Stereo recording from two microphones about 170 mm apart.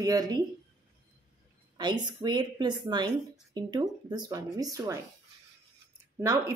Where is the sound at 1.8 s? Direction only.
25° right (ahead or behind).